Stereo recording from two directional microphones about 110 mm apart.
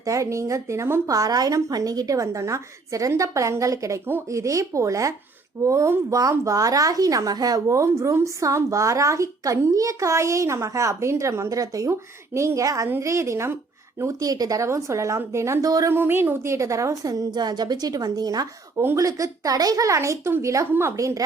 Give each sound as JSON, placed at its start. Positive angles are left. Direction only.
{"t": 0.0, "sound": "speech", "side_deg": -30}
{"t": 15.9, "sound": "a woman's voice", "side_deg": -20}
{"t": 18.8, "sound": "speech", "side_deg": -25}